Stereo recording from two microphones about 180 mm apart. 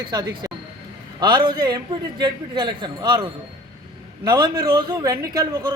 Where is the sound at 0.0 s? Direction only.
20° right (ahead or behind).